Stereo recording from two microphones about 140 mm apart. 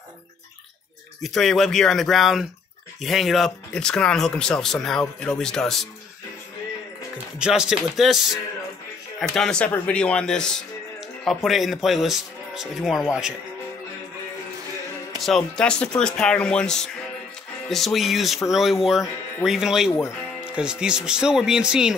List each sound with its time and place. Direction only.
1.2 s speech: centre (ahead or behind)
7.3 s speech: 5° right (ahead or behind)
15.2 s speech: 5° left (ahead or behind)
19.9 s speech: 15° left (ahead or behind)
20.5 s speech: 5° right (ahead or behind)